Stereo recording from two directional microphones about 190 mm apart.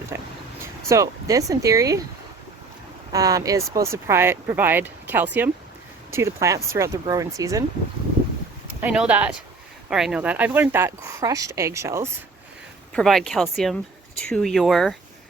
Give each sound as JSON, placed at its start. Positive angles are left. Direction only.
{"t": 0.1, "sound": "a sound", "side_deg": -15}
{"t": 0.9, "sound": "speech", "side_deg": -15}
{"t": 3.1, "sound": "speech", "side_deg": -20}
{"t": 8.8, "sound": "speech", "side_deg": -5}
{"t": 12.9, "sound": "speech", "side_deg": 0}